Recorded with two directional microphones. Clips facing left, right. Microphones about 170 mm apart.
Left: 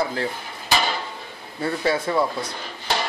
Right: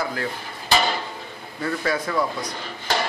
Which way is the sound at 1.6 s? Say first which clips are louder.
Left 2 dB; 25° left (ahead or behind).